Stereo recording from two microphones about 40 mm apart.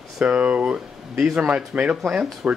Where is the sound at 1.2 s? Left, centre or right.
Centre.